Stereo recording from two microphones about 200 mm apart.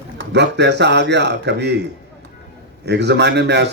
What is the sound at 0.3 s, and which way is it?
A man's voice, 60° right (ahead or behind).